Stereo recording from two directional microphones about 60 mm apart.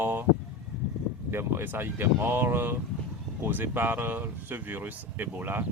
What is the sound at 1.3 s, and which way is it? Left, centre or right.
A man's voice, right.